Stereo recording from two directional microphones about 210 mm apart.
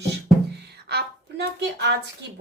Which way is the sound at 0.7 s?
50° right (ahead or behind).